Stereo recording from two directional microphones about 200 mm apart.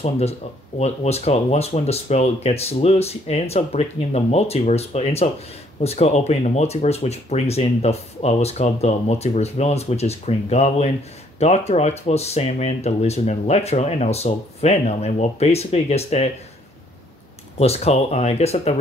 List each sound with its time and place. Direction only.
0.0 s speech: 30° left (ahead or behind)
17.6 s speech: 30° left (ahead or behind)